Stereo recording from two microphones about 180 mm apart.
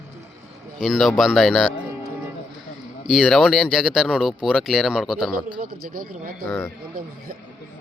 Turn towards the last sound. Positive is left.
turn(degrees=-55)  # may be behind; listen again after turning